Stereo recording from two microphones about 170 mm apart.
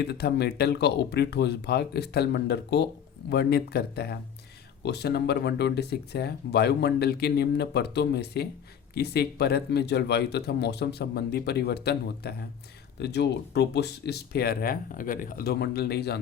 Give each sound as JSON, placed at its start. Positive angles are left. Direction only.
{"t": 0.0, "sound": "speech", "side_deg": 70}